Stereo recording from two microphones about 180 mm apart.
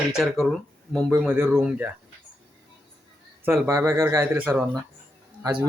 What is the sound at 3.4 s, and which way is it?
A man's voice, 15° right (ahead or behind).